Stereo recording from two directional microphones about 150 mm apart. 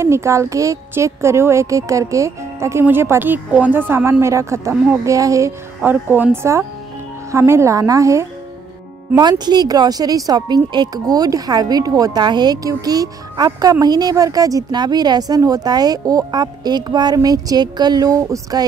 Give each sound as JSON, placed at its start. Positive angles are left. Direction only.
{"t": 0.0, "sound": "speech", "side_deg": -20}